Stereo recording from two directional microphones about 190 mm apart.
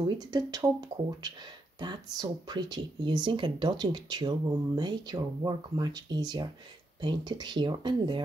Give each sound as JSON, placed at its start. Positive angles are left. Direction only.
{"t": 0.2, "sound": "speech", "side_deg": -20}